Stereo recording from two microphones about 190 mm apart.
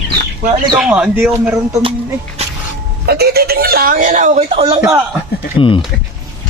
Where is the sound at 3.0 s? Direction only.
55° right (ahead or behind); by 4.8 s 30° right (ahead or behind).